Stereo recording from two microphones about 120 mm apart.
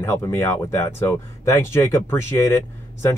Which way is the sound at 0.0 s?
25° left (ahead or behind).